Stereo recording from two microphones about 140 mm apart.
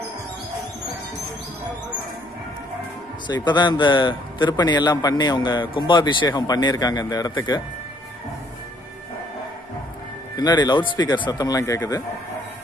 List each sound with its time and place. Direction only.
3.3 s speech: 30° left (ahead or behind)
10.3 s speech: 30° left (ahead or behind)